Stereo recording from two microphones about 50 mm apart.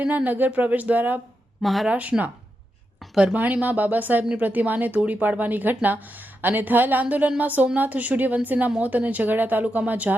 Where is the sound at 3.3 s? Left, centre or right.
Right.